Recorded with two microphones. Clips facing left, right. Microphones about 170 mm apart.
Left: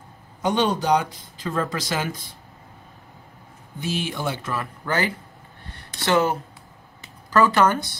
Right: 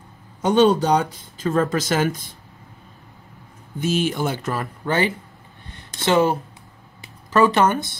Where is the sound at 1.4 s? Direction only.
45° right (ahead or behind).